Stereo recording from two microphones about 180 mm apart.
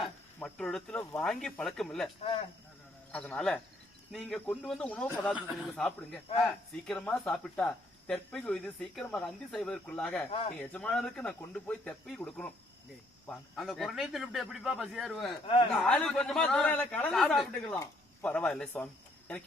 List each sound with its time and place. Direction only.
0.3 s speech: 5° left (ahead or behind)
2.2 s speech: 30° left (ahead or behind)
3.1 s speech: 5° left (ahead or behind)
15.4 s speech: 30° left (ahead or behind)
15.7 s speech: 5° left (ahead or behind)